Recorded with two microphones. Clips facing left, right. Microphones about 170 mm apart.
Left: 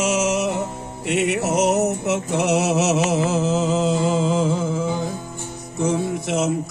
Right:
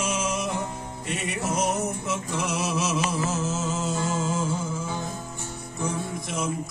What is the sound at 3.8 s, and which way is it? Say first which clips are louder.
Music: left 8 dB; 90° left.